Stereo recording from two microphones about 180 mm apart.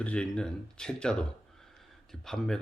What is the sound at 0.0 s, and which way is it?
Speech, 5° left (ahead or behind).